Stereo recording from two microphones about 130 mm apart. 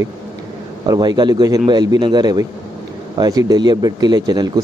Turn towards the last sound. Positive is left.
turn(degrees=-30)  # may be behind; listen again after turning